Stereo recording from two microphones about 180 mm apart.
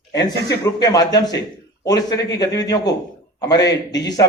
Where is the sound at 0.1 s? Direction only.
20° left (ahead or behind).